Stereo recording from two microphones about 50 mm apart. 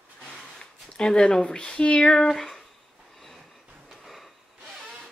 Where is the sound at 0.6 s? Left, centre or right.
Centre.